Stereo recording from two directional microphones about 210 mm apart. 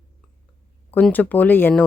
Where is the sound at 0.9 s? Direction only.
10° left (ahead or behind).